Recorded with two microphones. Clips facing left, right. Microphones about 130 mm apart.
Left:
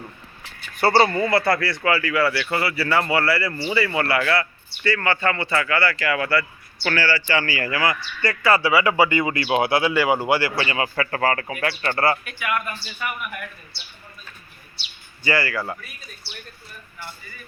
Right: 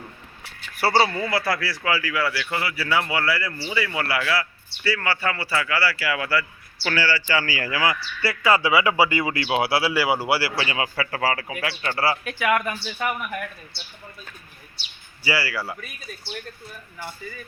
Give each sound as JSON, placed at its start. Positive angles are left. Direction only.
{"t": 0.8, "sound": "a man's voice", "side_deg": -5}
{"t": 12.3, "sound": "speech", "side_deg": -90}
{"t": 15.2, "sound": "speech", "side_deg": -10}